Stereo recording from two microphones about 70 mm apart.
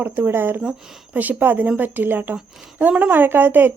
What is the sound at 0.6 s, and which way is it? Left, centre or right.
Speech, centre.